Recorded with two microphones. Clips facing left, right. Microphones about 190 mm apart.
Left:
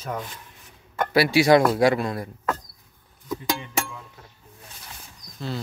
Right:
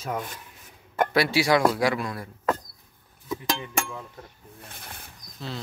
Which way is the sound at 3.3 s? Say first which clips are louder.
Left 1 dB; centre (ahead or behind).